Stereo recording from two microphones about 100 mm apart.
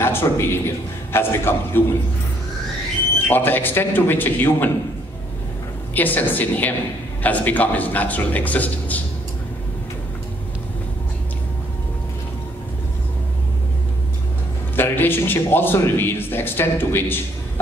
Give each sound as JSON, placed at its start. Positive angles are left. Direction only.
{"t": 0.0, "sound": "a man's voice", "side_deg": 25}
{"t": 3.3, "sound": "a man's voice", "side_deg": 20}
{"t": 5.9, "sound": "speech", "side_deg": 20}
{"t": 14.8, "sound": "a man's voice", "side_deg": 20}